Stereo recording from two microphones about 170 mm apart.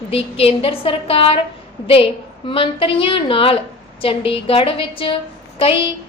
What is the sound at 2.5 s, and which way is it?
A woman's voice, 30° left (ahead or behind).